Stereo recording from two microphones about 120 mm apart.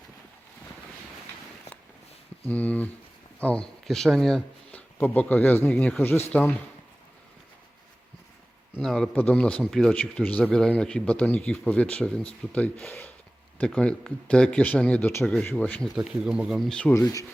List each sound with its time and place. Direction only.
2.5 s a man's voice: 10° left (ahead or behind)
8.8 s a man's voice: 5° left (ahead or behind)
16.0 s speech: 5° right (ahead or behind)
16.9 s speech: 25° left (ahead or behind)